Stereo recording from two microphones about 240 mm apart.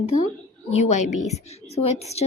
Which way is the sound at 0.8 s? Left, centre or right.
Left.